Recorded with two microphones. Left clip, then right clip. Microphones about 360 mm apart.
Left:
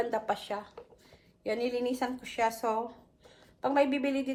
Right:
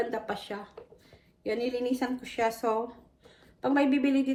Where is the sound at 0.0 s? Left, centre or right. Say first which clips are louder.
Left 1 dB; centre.